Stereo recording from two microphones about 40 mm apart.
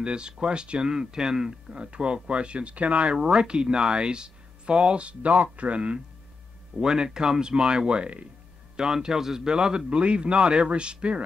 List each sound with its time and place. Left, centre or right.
0.0 s speech: right
6.8 s speech: centre
8.7 s speech: centre